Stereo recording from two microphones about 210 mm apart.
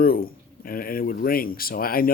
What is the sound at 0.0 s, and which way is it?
Speech, 45° left (ahead or behind).